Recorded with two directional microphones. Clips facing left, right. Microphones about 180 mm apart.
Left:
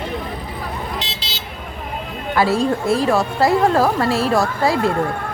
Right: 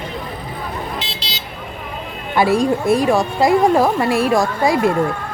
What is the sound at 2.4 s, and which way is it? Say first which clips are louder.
A woman's voice: right 2 dB; 15° right (ahead or behind).